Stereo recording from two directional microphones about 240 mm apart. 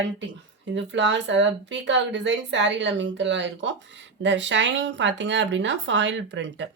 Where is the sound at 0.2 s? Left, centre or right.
Right.